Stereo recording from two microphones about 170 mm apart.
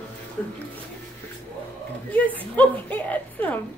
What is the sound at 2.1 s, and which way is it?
Speech, 10° left (ahead or behind).